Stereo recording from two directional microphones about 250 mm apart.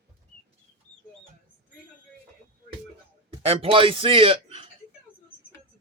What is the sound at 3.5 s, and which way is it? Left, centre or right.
A man's voice, right.